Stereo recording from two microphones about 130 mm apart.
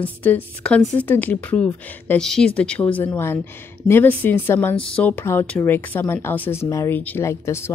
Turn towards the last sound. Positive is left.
turn(degrees=20)  # may be behind; listen again after turning